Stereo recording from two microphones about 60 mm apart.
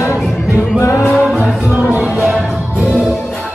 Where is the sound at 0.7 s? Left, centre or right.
Left.